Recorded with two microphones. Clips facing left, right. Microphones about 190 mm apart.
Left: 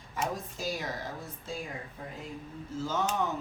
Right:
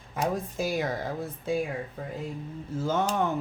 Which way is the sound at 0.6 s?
55° right (ahead or behind).